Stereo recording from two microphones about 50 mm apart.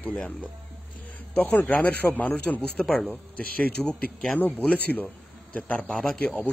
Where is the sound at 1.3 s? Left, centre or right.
Left.